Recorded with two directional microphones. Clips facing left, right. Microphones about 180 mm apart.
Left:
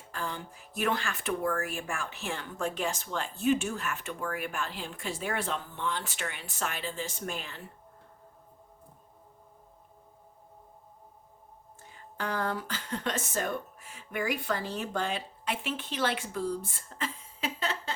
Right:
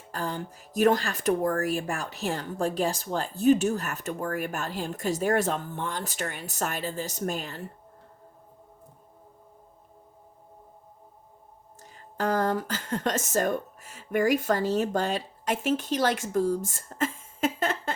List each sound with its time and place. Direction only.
0.1 s speech: 40° right (ahead or behind)
11.8 s speech: 40° right (ahead or behind)